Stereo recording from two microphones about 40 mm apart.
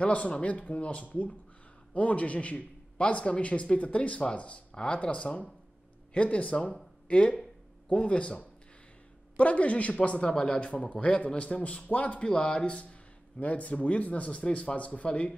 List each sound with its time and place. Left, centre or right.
0.0 s a man's voice: left
12.3 s speech: left
13.4 s a man's voice: left